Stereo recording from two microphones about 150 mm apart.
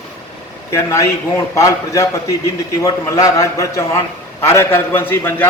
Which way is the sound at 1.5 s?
20° left (ahead or behind).